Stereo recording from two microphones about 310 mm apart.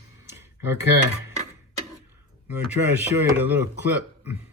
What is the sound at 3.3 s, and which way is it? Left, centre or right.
Speech, centre.